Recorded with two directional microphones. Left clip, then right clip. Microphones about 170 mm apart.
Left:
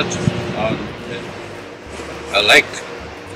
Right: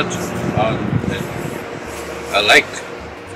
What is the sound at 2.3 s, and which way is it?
Speech, 5° left (ahead or behind).